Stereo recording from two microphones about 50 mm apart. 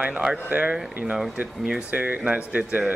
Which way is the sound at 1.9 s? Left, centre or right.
Right.